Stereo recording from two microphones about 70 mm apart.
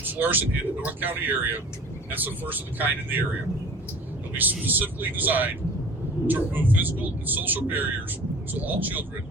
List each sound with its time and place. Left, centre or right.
0.0 s speech: right
4.4 s speech: right